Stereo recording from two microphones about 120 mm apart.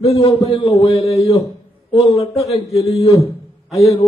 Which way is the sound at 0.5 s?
50° left (ahead or behind).